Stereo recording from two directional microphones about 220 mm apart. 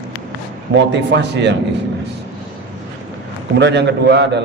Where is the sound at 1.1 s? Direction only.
55° right (ahead or behind).